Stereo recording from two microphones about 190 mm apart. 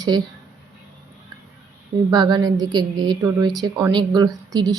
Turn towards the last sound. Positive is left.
turn(degrees=-20)  # may be behind; listen again after turning